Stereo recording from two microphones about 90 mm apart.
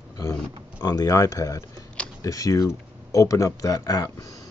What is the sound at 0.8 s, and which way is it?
Speech, 40° left (ahead or behind).